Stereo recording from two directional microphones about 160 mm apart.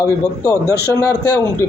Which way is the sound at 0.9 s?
20° left (ahead or behind).